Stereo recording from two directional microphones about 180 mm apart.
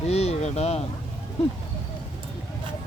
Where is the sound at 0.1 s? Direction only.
35° left (ahead or behind).